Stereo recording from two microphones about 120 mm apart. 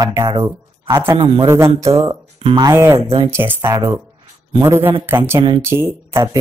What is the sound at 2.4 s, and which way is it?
Speech, 50° right (ahead or behind).